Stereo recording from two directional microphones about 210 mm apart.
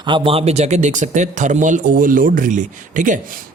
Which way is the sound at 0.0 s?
25° right (ahead or behind).